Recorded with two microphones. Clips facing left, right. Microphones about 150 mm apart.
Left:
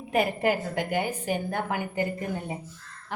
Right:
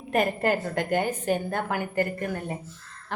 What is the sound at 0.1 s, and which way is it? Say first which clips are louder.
A woman's voice: right 1 dB; 10° left (ahead or behind).